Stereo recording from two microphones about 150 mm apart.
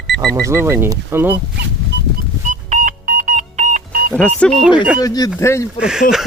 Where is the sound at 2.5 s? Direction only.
55° right (ahead or behind).